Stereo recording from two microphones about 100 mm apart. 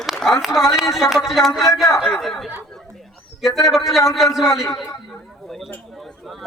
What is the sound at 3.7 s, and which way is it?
Speech, centre (ahead or behind).